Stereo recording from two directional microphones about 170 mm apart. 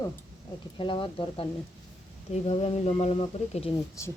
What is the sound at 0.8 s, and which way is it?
Speech, 30° left (ahead or behind).